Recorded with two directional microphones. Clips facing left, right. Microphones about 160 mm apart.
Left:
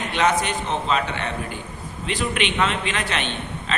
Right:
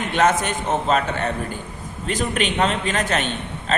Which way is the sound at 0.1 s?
45° right (ahead or behind).